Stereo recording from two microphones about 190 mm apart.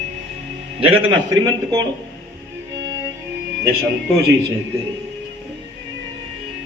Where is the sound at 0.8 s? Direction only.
30° right (ahead or behind).